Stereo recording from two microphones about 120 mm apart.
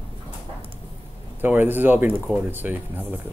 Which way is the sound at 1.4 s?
15° right (ahead or behind).